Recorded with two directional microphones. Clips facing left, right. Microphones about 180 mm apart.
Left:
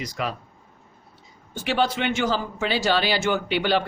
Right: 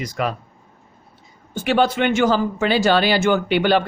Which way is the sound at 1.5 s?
50° right (ahead or behind).